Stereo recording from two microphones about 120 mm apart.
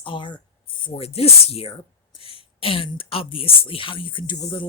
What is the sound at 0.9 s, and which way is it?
Speech, 55° left (ahead or behind).